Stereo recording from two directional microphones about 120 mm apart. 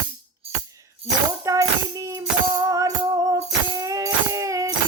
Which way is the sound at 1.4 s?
25° right (ahead or behind).